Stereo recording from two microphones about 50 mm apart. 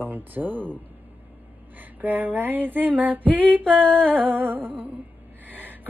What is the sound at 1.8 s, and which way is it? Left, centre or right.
Speech, right.